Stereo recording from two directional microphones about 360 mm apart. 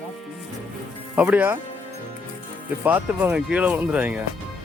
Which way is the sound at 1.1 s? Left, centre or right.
Centre.